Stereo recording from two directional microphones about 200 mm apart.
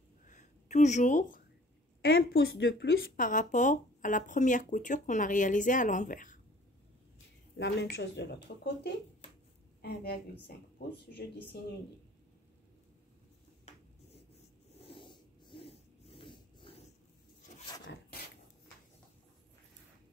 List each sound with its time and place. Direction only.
0.3 s a sound: 35° left (ahead or behind)
2.0 s a woman's voice: 50° left (ahead or behind)
3.2 s speech: 40° left (ahead or behind)
7.5 s a woman's voice: 55° left (ahead or behind)
9.8 s a woman's voice: 55° left (ahead or behind)
13.7 s writing: 35° left (ahead or behind)
14.8 s snort: 25° left (ahead or behind)